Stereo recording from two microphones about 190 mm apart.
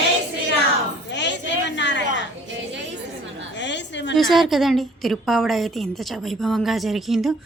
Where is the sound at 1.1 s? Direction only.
65° left (ahead or behind).